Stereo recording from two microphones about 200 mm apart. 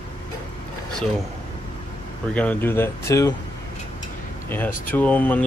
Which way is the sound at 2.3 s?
5° left (ahead or behind).